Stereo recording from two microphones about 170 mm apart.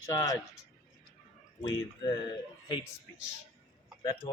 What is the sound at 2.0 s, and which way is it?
Speech, 25° left (ahead or behind).